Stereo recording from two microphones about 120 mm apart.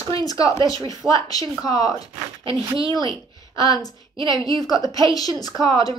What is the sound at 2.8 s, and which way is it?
Speech, 45° right (ahead or behind).